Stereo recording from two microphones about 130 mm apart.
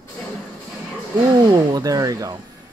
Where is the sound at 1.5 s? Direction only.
30° right (ahead or behind).